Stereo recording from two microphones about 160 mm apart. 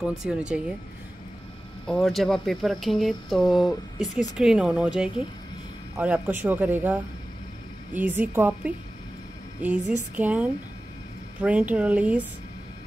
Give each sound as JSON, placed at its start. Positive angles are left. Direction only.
{"t": 0.0, "sound": "speech", "side_deg": -5}
{"t": 1.9, "sound": "speech", "side_deg": 0}